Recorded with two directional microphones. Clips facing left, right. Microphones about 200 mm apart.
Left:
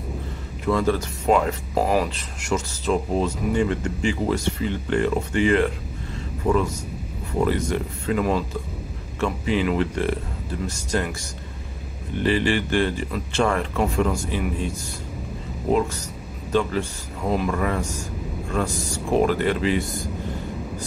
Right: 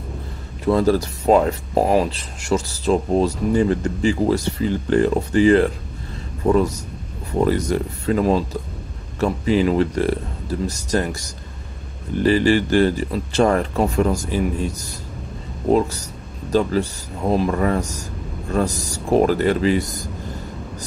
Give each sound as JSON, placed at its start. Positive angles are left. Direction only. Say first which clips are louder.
{"t": 0.7, "sound": "speech", "louder": "right 5 dB", "side_deg": -35}
{"t": 12.2, "sound": "speech", "louder": "right 5 dB", "side_deg": -40}
{"t": 16.5, "sound": "speech", "louder": "right 4 dB", "side_deg": -35}